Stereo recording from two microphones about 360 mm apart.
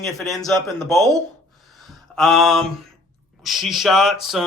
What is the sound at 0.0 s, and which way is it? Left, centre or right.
Speech, centre.